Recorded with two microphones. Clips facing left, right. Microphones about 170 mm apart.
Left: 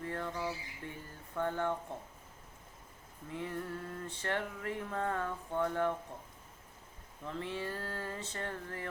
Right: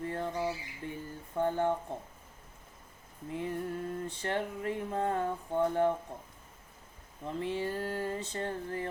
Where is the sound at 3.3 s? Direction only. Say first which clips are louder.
Right 4 dB; 15° right (ahead or behind).